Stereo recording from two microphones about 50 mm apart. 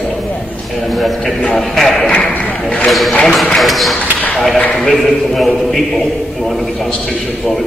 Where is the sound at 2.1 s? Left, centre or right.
Left.